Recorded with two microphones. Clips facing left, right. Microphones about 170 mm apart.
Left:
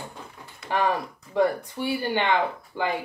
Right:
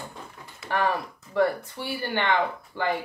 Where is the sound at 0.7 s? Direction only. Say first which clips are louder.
Left 1 dB; 20° left (ahead or behind).